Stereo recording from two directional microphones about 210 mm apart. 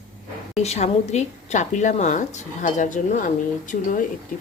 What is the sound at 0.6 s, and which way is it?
A woman's voice, 30° left (ahead or behind).